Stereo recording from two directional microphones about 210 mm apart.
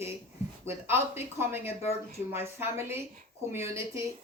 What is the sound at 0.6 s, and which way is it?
A woman's voice, 10° right (ahead or behind).